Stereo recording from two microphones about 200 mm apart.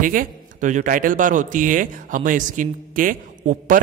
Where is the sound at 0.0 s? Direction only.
40° right (ahead or behind).